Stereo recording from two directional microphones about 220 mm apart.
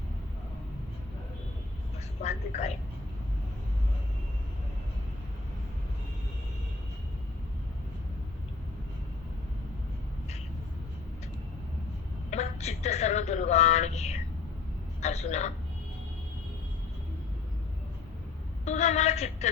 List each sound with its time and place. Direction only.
2.2 s speech: 30° left (ahead or behind)
12.3 s a sound: 30° left (ahead or behind)
15.0 s a man's voice: 30° left (ahead or behind)
18.6 s a woman's voice: 30° left (ahead or behind)